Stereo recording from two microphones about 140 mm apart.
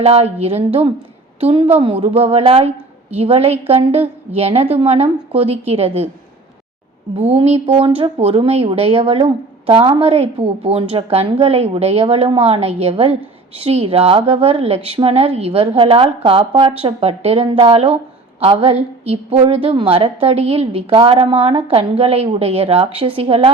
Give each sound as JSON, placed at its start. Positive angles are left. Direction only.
{"t": 0.0, "sound": "speech", "side_deg": -45}
{"t": 7.2, "sound": "speech", "side_deg": -50}